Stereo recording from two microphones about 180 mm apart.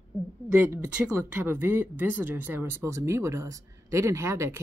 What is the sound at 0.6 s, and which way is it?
Speech, 10° right (ahead or behind).